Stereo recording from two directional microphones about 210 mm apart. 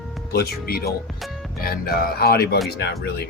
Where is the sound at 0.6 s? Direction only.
45° left (ahead or behind).